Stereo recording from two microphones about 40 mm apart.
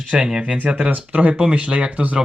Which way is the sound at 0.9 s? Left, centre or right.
Right.